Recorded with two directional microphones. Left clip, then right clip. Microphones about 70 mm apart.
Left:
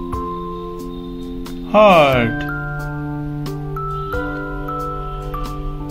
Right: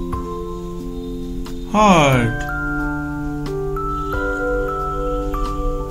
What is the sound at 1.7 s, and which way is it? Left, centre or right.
Speech, left.